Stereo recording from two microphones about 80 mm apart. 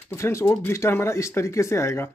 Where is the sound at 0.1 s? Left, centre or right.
Left.